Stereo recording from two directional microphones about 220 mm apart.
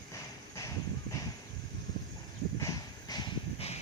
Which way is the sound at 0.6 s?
15° left (ahead or behind).